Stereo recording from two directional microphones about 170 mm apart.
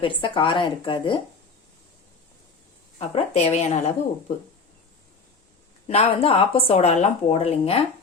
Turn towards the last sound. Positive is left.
turn(degrees=35)  # may be behind; listen again after turning